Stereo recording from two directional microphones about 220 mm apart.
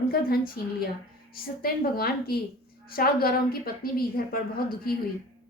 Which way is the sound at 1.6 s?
45° left (ahead or behind).